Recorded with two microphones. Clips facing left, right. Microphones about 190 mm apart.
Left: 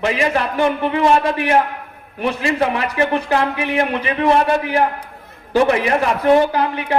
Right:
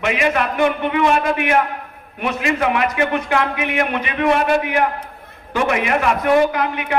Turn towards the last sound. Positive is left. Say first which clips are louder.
# left 1 dB
turn(degrees=30)  # may be behind; listen again after turning